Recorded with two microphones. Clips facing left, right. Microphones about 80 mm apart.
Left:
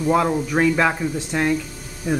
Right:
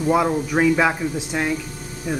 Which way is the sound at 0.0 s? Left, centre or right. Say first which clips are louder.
Even; centre.